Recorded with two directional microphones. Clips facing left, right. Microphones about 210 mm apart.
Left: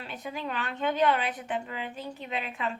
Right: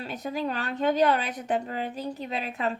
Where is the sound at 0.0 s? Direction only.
40° right (ahead or behind).